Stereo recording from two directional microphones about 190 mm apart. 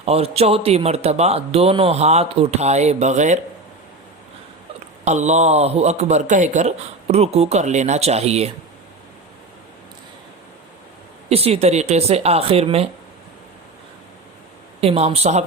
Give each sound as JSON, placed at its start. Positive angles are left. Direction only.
{"t": 0.0, "sound": "a man's voice", "side_deg": -30}
{"t": 5.0, "sound": "a man's voice", "side_deg": -35}
{"t": 11.3, "sound": "a man's voice", "side_deg": -30}
{"t": 14.8, "sound": "a man's voice", "side_deg": -35}